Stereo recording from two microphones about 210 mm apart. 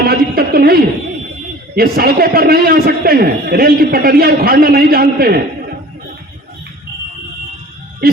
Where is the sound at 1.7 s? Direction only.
45° right (ahead or behind).